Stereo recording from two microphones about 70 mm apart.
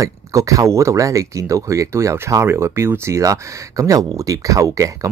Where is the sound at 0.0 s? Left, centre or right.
Right.